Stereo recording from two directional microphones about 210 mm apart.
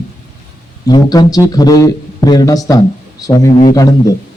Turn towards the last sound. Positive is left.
turn(degrees=15)  # may be behind; listen again after turning